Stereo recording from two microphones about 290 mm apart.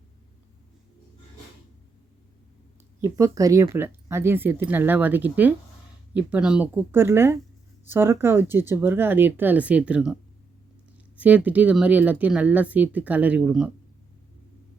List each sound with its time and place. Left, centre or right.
3.0 s speech: centre
11.2 s speech: centre